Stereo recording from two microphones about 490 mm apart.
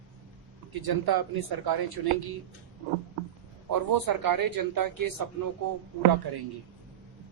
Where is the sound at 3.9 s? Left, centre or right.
Right.